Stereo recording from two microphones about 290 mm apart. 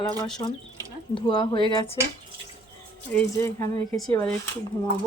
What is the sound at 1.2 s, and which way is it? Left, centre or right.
Speech, centre.